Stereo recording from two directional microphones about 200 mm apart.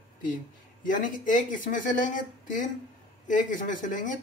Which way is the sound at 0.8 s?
40° left (ahead or behind).